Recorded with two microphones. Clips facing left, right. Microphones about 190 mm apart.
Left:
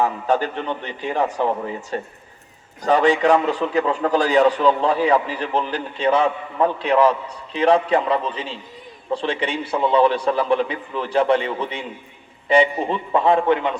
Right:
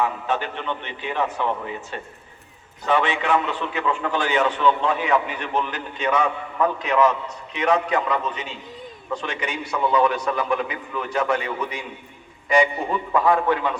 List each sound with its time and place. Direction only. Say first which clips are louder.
0.0 s a man's voice: left 4 dB; 40° left (ahead or behind); by 13.7 s 25° left (ahead or behind)